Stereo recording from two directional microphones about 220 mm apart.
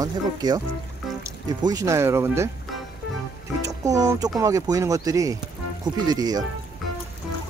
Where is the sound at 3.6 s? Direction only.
15° right (ahead or behind).